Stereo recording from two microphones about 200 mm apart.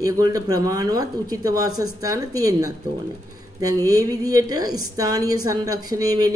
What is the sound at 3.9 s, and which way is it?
A woman's voice, 15° right (ahead or behind).